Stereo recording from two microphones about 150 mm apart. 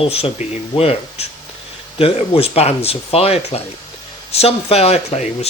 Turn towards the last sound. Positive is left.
turn(degrees=45)  # may be behind; listen again after turning